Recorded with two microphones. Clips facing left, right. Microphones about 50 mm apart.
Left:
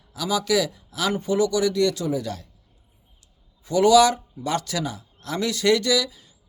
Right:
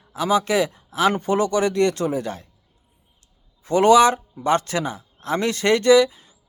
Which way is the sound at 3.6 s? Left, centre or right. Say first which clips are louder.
Right 2 dB; right.